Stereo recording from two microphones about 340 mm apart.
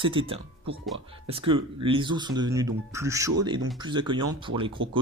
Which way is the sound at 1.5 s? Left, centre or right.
Centre.